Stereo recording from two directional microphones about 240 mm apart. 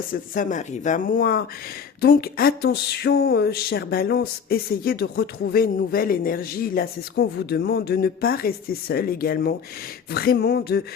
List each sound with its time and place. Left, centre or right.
0.1 s speech: left